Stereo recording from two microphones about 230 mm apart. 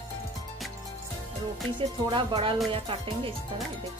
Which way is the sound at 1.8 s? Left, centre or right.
Right.